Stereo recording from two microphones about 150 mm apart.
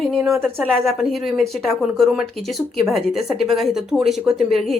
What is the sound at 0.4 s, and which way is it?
Speech, centre (ahead or behind).